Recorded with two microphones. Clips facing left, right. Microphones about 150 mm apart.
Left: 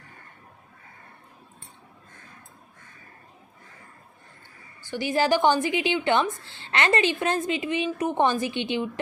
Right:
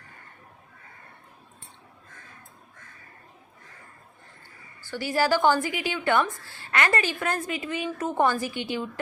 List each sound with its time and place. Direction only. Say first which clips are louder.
4.8 s a woman's voice: left 1 dB; 20° left (ahead or behind)